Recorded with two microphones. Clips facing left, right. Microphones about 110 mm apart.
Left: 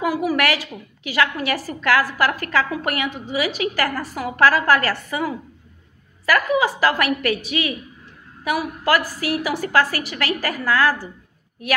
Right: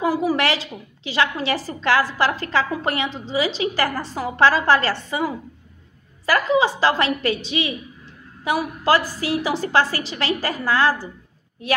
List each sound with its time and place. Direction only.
0.0 s a woman's voice: 30° right (ahead or behind)